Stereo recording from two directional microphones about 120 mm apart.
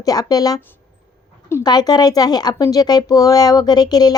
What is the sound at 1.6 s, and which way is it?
A woman's voice, 35° left (ahead or behind).